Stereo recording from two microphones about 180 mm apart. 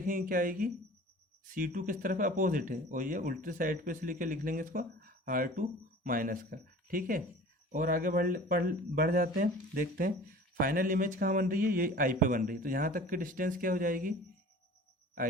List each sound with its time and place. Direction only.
0.0 s speech: 50° right (ahead or behind)